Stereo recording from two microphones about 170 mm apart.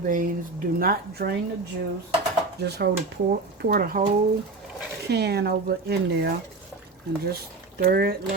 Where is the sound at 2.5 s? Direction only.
70° right (ahead or behind).